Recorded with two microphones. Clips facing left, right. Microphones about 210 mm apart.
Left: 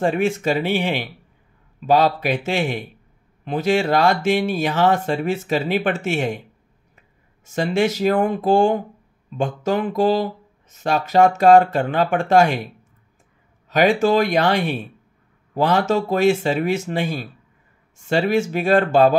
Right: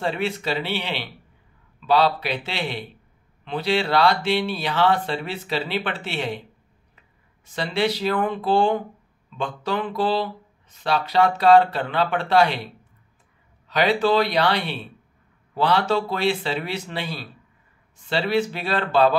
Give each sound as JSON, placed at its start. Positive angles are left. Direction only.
{"t": 0.0, "sound": "speech", "side_deg": 45}
{"t": 13.7, "sound": "speech", "side_deg": 45}